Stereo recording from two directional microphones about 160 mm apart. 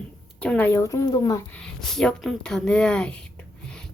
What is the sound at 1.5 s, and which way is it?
A woman's voice, 5° left (ahead or behind).